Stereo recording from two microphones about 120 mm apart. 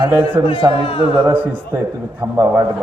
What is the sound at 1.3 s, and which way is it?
A man's voice, 15° right (ahead or behind).